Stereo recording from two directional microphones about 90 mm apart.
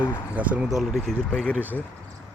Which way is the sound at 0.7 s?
Centre (ahead or behind).